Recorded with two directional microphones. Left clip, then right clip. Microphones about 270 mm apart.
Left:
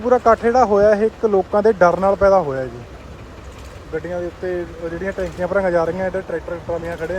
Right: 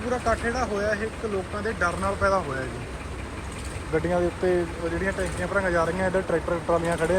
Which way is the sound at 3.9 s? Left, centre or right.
Centre.